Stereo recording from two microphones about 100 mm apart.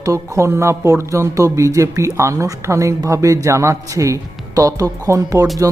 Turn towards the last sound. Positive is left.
turn(degrees=-35)  # may be behind; listen again after turning